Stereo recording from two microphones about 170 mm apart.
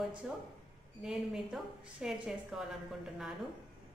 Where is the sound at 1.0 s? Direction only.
5° right (ahead or behind).